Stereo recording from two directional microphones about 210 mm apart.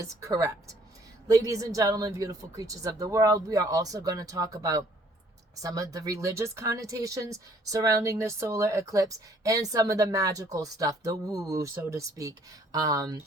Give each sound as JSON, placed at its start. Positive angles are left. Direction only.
{"t": 0.0, "sound": "speech", "side_deg": -15}